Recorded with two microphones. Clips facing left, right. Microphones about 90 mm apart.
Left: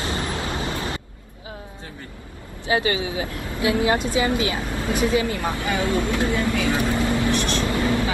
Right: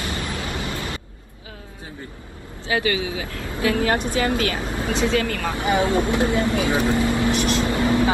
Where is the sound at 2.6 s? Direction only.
25° left (ahead or behind).